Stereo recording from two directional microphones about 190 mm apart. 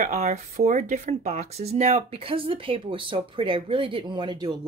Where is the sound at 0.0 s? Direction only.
40° right (ahead or behind).